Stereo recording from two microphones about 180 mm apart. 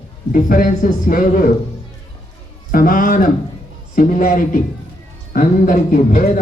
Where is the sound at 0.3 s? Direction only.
50° left (ahead or behind).